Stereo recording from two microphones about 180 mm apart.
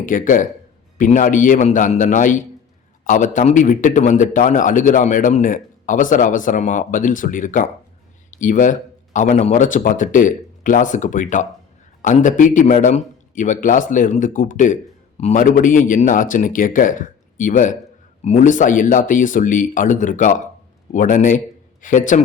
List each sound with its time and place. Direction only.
0.0 s a man's voice: 45° left (ahead or behind)